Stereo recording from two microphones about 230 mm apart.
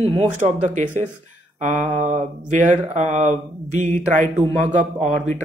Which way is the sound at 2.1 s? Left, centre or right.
Right.